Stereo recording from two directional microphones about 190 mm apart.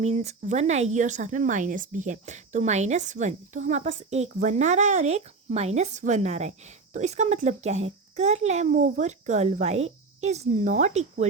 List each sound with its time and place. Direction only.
0.0 s a child's voice: 35° right (ahead or behind)